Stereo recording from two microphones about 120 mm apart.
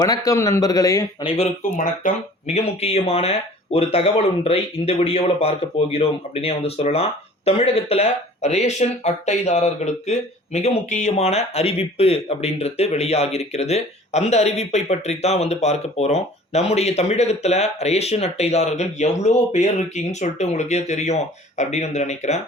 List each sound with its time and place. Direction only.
0.0 s a man's voice: 30° left (ahead or behind)
1.2 s speech: 50° left (ahead or behind)
2.5 s speech: 60° left (ahead or behind)